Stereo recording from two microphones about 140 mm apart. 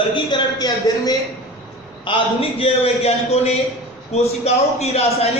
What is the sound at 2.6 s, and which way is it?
A man's voice, 45° left (ahead or behind).